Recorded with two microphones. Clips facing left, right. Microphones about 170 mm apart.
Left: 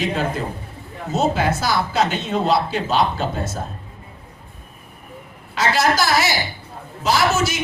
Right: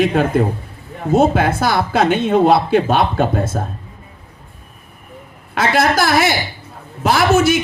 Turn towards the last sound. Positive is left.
turn(degrees=-55)  # may be behind; listen again after turning